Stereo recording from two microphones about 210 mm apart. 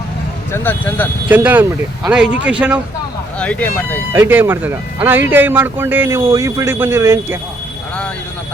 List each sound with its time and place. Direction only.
0.5 s speech: 10° left (ahead or behind)
1.3 s a man's voice: 10° right (ahead or behind)
3.3 s speech: 5° left (ahead or behind)
4.1 s a man's voice: 10° right (ahead or behind)